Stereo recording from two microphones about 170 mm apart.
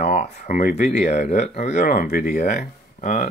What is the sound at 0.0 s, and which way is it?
Speech, 40° left (ahead or behind).